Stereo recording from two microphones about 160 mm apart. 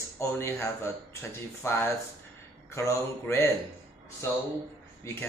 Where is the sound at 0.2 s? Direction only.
15° left (ahead or behind).